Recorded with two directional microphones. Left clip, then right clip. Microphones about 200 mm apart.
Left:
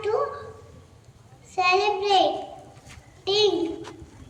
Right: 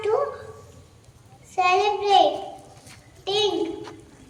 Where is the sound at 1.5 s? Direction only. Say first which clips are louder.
Right 1 dB; 25° right (ahead or behind).